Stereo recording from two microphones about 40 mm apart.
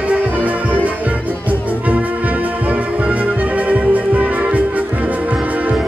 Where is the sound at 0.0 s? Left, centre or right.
Right.